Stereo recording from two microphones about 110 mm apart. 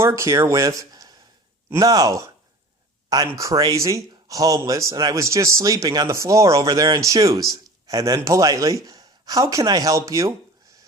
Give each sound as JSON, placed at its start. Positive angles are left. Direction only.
{"t": 0.0, "sound": "speech", "side_deg": -25}
{"t": 3.3, "sound": "speech", "side_deg": -30}